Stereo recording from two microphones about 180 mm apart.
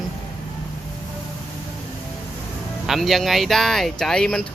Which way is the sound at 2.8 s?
Centre (ahead or behind).